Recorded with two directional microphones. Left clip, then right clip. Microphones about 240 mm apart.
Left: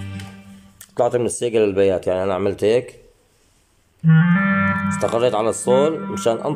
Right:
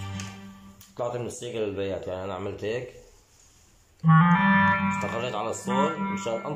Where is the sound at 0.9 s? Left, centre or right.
Left.